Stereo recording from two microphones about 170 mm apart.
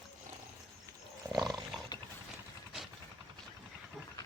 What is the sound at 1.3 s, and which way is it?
Roar, 20° right (ahead or behind).